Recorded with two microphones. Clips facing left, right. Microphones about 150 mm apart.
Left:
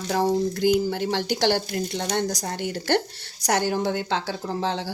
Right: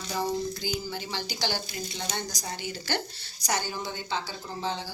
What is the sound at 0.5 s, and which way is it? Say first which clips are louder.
A woman's voice: left 12 dB; 65° left (ahead or behind).